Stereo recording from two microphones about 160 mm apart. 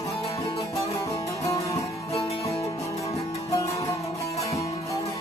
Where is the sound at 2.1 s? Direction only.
35° left (ahead or behind).